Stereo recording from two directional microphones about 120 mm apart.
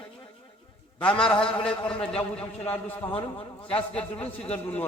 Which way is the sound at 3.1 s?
45° left (ahead or behind).